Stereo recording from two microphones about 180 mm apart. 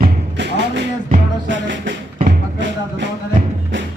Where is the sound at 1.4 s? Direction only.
90° right.